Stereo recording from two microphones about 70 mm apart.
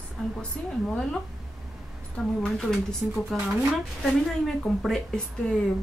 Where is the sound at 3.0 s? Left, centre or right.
Centre.